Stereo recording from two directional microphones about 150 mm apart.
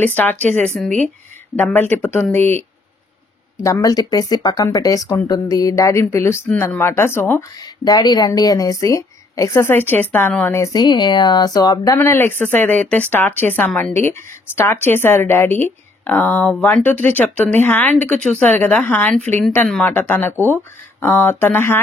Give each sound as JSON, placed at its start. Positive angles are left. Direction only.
{"t": 0.0, "sound": "speech", "side_deg": 10}
{"t": 1.6, "sound": "speech", "side_deg": 15}
{"t": 3.6, "sound": "speech", "side_deg": 20}
{"t": 14.0, "sound": "speech", "side_deg": 15}